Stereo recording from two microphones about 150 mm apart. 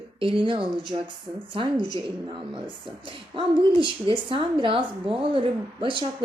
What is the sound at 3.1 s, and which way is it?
A woman's voice, 35° right (ahead or behind).